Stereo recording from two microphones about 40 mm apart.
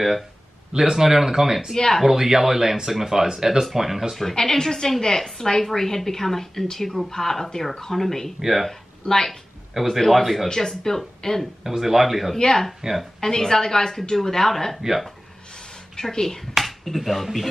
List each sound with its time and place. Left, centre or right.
0.7 s speech: centre
4.1 s a woman's voice: centre
8.4 s speech: centre
8.6 s speech: centre
9.8 s speech: centre
10.5 s a woman's voice: centre
11.6 s speech: centre
12.4 s a woman's voice: centre
14.8 s speech: centre
16.0 s a woman's voice: centre
16.5 s speech: centre